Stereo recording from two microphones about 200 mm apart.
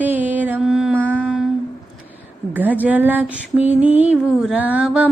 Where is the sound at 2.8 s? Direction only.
10° right (ahead or behind).